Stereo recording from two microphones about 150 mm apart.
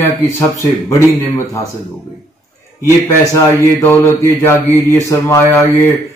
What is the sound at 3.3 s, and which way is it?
Mantra, 15° left (ahead or behind).